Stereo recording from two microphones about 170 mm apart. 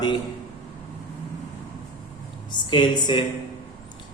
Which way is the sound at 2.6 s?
25° left (ahead or behind).